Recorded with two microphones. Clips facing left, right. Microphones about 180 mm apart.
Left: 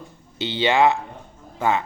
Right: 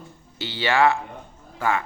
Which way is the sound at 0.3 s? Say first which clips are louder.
Left 3 dB; 20° left (ahead or behind).